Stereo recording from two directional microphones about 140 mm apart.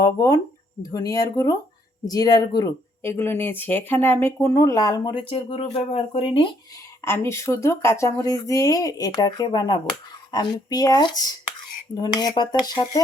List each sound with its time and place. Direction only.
0.0 s speech: 25° left (ahead or behind)
3.0 s speech: 15° left (ahead or behind); by 6.5 s 40° left (ahead or behind)
7.0 s speech: 20° left (ahead or behind)